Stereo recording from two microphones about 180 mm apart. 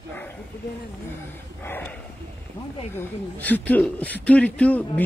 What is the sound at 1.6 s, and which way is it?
Dog, 10° left (ahead or behind).